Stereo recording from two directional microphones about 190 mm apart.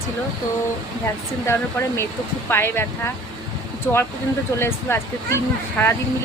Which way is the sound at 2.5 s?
10° left (ahead or behind).